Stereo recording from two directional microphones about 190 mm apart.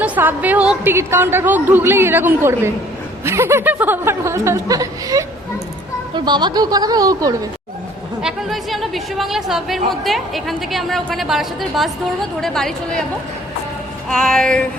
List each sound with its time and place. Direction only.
0.0 s a woman's voice: 10° right (ahead or behind)
8.2 s speech: centre (ahead or behind)
14.1 s speech: centre (ahead or behind)